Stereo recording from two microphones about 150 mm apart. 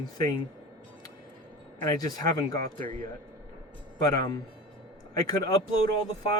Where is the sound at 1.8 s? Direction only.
25° left (ahead or behind).